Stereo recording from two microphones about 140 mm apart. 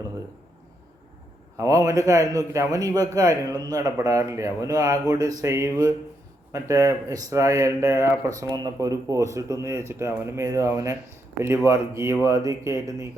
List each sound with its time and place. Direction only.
1.5 s speech: 25° right (ahead or behind)